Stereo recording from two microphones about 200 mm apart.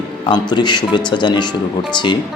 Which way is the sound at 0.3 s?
20° left (ahead or behind).